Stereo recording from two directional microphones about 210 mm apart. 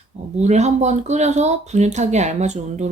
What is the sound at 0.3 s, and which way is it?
Speech, 35° right (ahead or behind).